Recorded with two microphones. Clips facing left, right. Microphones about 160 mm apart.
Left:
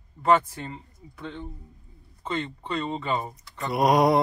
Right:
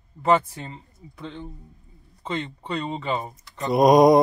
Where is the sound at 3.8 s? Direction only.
20° right (ahead or behind).